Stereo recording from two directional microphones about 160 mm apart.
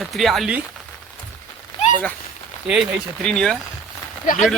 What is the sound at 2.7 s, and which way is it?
Speech, 5° right (ahead or behind).